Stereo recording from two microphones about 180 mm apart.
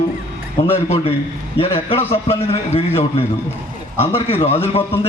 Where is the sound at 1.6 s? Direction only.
35° left (ahead or behind).